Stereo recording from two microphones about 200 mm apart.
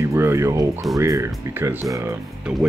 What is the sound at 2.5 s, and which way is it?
Speech, 5° right (ahead or behind).